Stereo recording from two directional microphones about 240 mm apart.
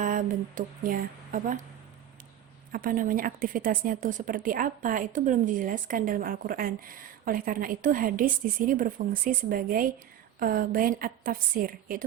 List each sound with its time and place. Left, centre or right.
0.0 s speech: right
2.7 s a woman's voice: right